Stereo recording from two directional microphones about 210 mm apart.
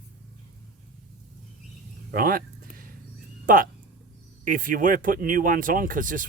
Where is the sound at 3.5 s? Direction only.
40° right (ahead or behind).